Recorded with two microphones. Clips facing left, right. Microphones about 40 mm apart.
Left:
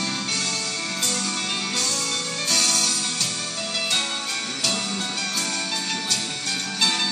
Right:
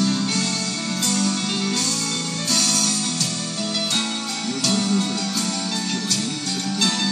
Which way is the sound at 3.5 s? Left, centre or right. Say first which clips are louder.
Right 1 dB; centre.